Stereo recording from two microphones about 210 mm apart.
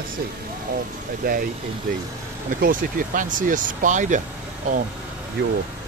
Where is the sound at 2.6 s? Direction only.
40° right (ahead or behind).